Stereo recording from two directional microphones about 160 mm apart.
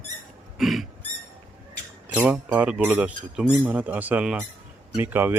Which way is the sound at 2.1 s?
10° right (ahead or behind).